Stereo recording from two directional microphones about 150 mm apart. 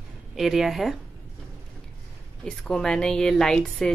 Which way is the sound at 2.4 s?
5° left (ahead or behind).